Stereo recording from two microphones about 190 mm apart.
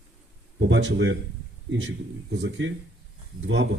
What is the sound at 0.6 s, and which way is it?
A man's voice, 70° right (ahead or behind).